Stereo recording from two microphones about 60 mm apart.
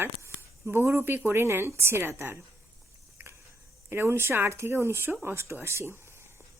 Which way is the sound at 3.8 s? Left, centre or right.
Right.